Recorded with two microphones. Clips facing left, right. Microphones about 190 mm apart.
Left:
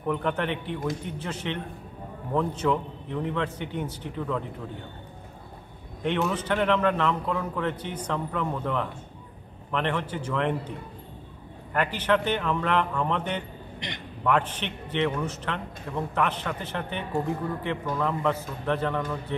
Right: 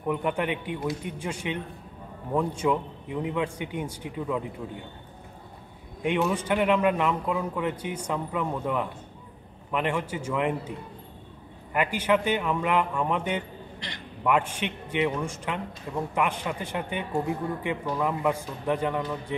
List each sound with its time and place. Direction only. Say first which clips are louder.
0.0 s a man's voice: even; 10° right (ahead or behind)
6.0 s a man's voice: right 1 dB; 10° right (ahead or behind)
11.7 s a man's voice: even; 10° right (ahead or behind)
13.7 s a sound: left 5 dB; 20° left (ahead or behind)
14.2 s a man's voice: even; 10° right (ahead or behind)